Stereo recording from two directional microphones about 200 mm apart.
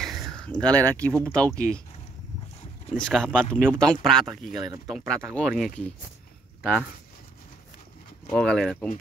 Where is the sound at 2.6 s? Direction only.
30° left (ahead or behind).